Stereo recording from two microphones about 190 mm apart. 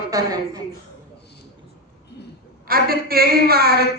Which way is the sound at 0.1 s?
20° right (ahead or behind).